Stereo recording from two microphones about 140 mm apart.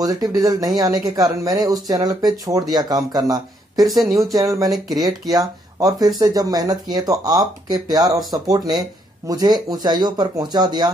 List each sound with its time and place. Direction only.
0.0 s speech: 25° right (ahead or behind)